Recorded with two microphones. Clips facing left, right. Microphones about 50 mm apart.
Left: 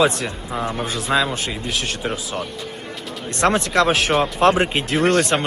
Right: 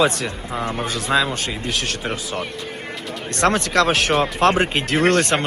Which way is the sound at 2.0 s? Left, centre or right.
Right.